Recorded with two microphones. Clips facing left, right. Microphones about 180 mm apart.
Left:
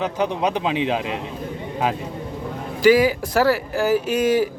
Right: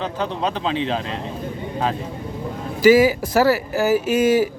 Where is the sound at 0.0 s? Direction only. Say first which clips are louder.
Left 2 dB; 15° left (ahead or behind).